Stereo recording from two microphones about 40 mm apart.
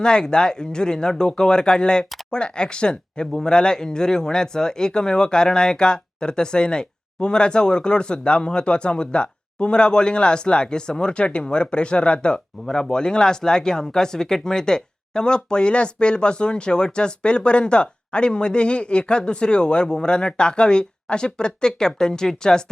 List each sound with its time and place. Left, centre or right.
0.0 s speech: left
12.6 s speech: centre